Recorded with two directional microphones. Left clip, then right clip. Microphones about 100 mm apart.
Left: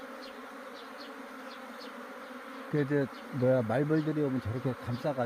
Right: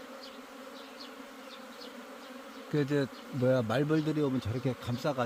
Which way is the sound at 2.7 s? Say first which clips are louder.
Even; centre (ahead or behind).